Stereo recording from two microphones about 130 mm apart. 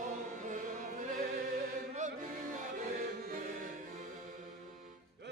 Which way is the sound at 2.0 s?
70° right (ahead or behind).